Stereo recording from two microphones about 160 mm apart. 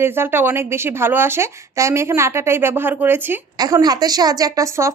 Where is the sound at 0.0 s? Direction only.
15° right (ahead or behind).